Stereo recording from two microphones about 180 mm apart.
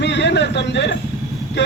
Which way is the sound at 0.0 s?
75° left (ahead or behind).